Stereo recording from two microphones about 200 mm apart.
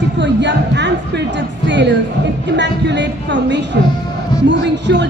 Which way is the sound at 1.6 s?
60° right (ahead or behind).